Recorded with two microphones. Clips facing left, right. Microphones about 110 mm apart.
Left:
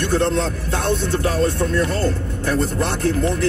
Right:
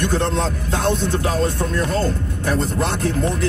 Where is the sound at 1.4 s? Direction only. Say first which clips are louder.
Left 2 dB; 25° right (ahead or behind).